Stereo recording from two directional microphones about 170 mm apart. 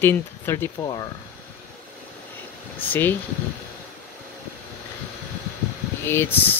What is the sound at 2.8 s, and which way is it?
Speech, 10° left (ahead or behind).